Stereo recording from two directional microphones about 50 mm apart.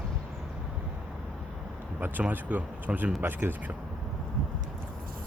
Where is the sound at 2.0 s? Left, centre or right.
Right.